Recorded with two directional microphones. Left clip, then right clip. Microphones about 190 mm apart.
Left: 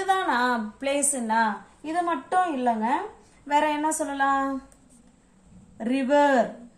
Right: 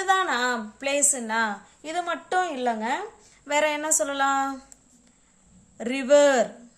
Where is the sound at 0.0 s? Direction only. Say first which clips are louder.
Even; 35° right (ahead or behind).